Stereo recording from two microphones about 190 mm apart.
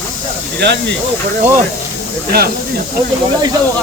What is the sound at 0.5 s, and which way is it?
Speech, 60° right (ahead or behind).